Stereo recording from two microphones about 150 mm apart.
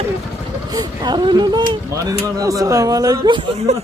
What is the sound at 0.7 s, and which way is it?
Speech, 25° right (ahead or behind).